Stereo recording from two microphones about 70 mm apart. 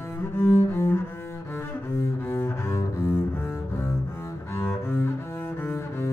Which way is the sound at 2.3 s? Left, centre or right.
Left.